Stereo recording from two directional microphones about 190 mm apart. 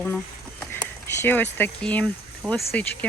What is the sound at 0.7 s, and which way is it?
Speech, 10° left (ahead or behind).